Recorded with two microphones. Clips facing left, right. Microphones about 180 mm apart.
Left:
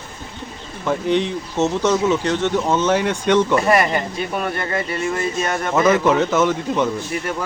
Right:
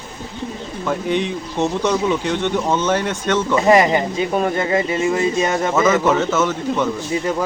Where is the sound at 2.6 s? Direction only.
10° left (ahead or behind).